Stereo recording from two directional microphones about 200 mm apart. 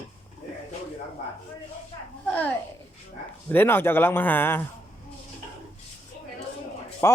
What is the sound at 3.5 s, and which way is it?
Speech, 10° left (ahead or behind).